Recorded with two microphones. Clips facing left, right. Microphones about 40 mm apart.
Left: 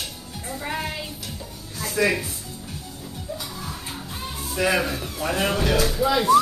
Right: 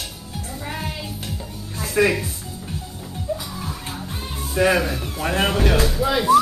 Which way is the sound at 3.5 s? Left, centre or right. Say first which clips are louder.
Right 3 dB; centre.